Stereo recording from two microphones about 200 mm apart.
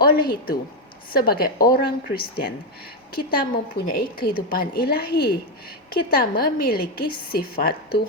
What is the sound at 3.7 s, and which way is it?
A woman's voice, 45° left (ahead or behind).